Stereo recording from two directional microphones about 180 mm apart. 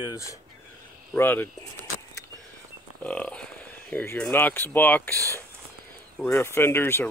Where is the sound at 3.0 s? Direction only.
5° left (ahead or behind).